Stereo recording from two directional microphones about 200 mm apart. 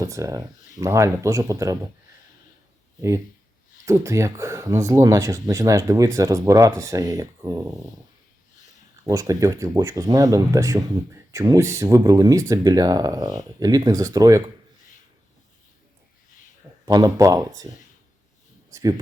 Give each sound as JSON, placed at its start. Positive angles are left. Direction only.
{"t": 0.0, "sound": "speech", "side_deg": -15}
{"t": 3.8, "sound": "speech", "side_deg": -15}
{"t": 9.0, "sound": "speech", "side_deg": -15}
{"t": 16.8, "sound": "speech", "side_deg": -20}
{"t": 18.7, "sound": "speech", "side_deg": -15}